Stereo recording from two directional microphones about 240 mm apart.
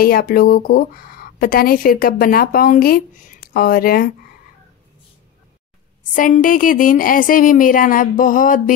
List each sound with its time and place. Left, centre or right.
0.0 s a woman's voice: left
6.1 s a woman's voice: left